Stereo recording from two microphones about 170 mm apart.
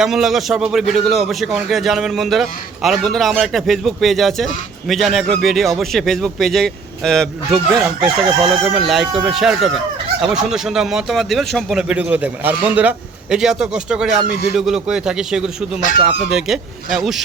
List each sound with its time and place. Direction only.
0.0 s speech: 5° right (ahead or behind)
8.0 s crowing: 30° right (ahead or behind)
8.9 s speech: 5° right (ahead or behind)